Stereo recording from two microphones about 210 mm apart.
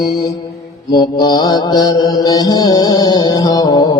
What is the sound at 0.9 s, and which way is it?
Mantra, 20° left (ahead or behind).